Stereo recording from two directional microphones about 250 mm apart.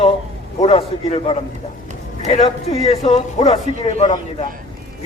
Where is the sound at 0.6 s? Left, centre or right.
Left.